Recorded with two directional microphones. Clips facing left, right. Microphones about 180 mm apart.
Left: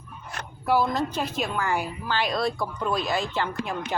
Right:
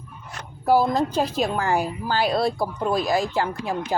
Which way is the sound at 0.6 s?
40° right (ahead or behind).